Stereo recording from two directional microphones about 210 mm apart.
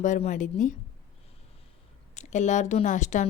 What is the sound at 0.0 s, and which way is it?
Speech, 35° left (ahead or behind).